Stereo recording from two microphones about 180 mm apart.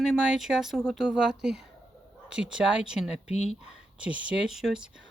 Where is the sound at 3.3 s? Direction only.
40° left (ahead or behind).